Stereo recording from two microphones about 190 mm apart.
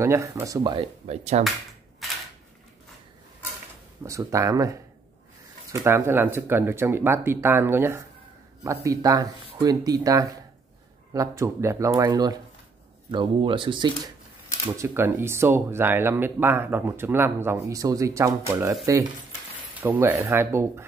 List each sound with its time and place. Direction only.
0.0 s speech: 15° right (ahead or behind)
1.0 s speech: 35° right (ahead or behind)
4.0 s speech: 15° right (ahead or behind)
14.7 s speech: 15° right (ahead or behind)
19.8 s speech: 10° right (ahead or behind)